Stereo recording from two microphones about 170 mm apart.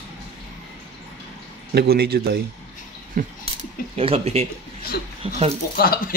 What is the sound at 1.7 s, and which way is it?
Speech, 70° right (ahead or behind).